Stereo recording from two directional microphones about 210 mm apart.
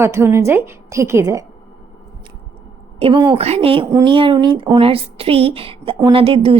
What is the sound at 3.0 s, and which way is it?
A woman's voice, 25° right (ahead or behind).